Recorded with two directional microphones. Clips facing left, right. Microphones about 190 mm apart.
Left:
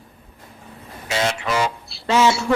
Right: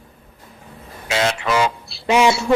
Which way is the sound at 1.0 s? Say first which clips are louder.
Right 2 dB; 80° right.